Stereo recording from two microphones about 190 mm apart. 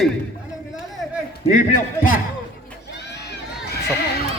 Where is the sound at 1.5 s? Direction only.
45° left (ahead or behind).